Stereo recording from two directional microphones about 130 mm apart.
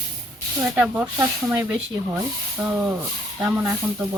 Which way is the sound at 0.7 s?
10° right (ahead or behind).